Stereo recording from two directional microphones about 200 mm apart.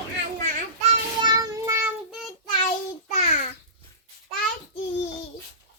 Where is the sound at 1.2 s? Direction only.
20° right (ahead or behind).